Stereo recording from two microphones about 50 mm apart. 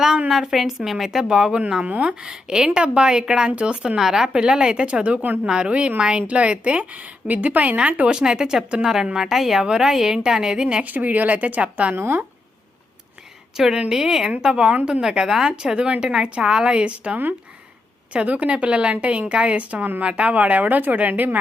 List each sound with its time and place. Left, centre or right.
0.3 s a woman's voice: centre
1.8 s speech: right
2.0 s speech: centre
3.9 s speech: centre; by 5.4 s right
5.5 s a woman's voice: centre
10.8 s speech: right
11.9 s speech: right
13.6 s speech: centre; by 21.3 s right